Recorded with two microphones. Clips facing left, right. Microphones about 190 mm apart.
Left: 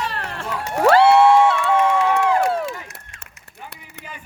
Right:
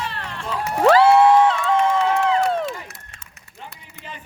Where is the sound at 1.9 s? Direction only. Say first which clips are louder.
Left 1 dB; 70° left (ahead or behind).